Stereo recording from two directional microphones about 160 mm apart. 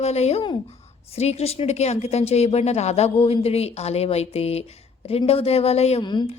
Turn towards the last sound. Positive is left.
turn(degrees=30)  # may be behind; listen again after turning